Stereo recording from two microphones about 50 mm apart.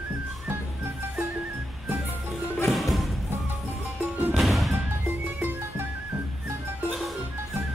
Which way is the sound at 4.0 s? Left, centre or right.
Right.